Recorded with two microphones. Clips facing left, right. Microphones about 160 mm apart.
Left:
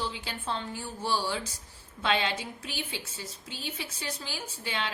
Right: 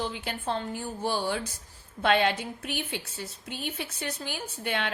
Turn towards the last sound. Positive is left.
turn(degrees=-55)  # may be behind; listen again after turning